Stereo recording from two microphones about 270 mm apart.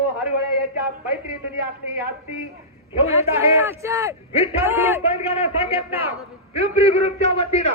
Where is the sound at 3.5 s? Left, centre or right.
Centre.